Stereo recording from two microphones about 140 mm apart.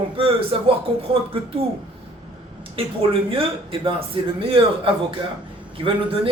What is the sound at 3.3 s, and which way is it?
A man's voice, 40° right (ahead or behind).